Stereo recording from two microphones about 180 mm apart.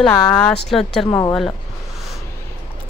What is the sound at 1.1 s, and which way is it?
Speech, 20° left (ahead or behind).